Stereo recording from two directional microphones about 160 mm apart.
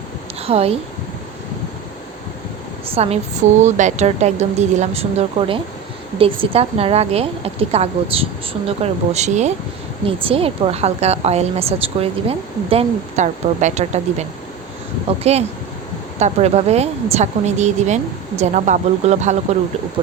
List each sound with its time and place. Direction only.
0.4 s a woman's voice: 40° right (ahead or behind)
2.8 s a woman's voice: 40° right (ahead or behind)